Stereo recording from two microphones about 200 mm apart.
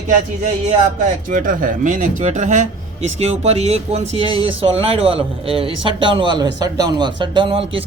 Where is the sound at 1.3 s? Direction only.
45° right (ahead or behind).